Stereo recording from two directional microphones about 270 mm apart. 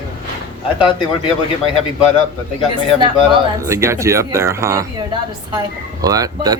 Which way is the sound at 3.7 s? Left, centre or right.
Centre.